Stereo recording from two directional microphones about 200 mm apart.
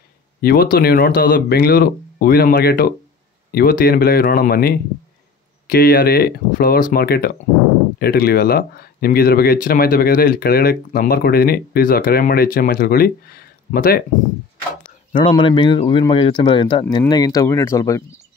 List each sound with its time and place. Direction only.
0.4 s speech: 50° left (ahead or behind)
15.1 s speech: 25° left (ahead or behind)